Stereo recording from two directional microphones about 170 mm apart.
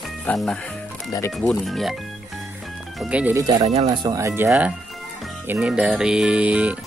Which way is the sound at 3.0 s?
10° right (ahead or behind).